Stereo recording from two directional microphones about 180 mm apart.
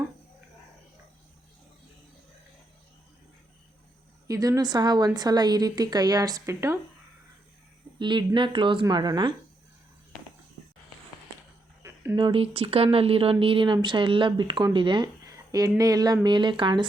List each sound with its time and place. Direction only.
4.3 s speech: 20° right (ahead or behind)
7.9 s speech: 25° right (ahead or behind)
11.8 s a sound: 15° right (ahead or behind)
12.1 s speech: 30° right (ahead or behind)